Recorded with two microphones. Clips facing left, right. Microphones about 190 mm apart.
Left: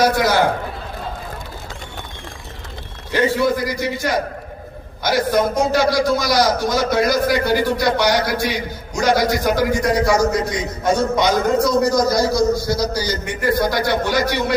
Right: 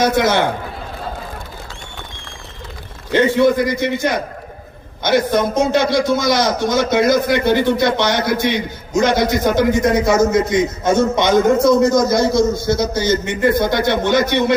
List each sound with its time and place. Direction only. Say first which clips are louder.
0.0 s a man's voice: right 1 dB; 20° right (ahead or behind)
3.1 s a man's voice: right 4 dB; 25° right (ahead or behind)